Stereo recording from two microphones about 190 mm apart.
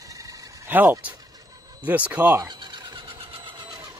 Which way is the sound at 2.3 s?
25° right (ahead or behind).